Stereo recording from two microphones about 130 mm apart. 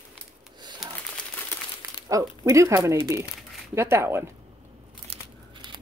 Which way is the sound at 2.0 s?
25° right (ahead or behind).